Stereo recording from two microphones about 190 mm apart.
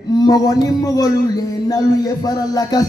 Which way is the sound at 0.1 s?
20° left (ahead or behind).